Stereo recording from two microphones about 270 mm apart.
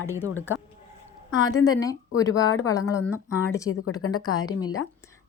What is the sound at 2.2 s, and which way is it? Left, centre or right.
A woman's voice, centre.